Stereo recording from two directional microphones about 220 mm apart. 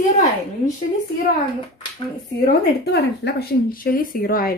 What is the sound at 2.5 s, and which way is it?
Speech, 45° left (ahead or behind).